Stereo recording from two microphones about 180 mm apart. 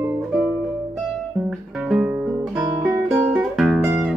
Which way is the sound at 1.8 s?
5° right (ahead or behind).